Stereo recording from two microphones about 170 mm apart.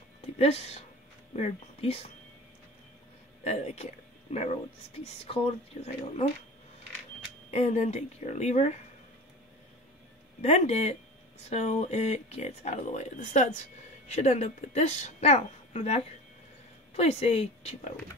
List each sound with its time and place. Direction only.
0.4 s speech: 40° left (ahead or behind)
3.4 s speech: 40° left (ahead or behind)
7.5 s speech: 40° left (ahead or behind)
10.4 s speech: 40° left (ahead or behind)